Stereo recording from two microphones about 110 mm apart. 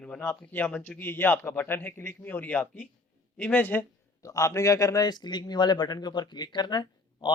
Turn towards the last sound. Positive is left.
turn(degrees=40)  # may be behind; listen again after turning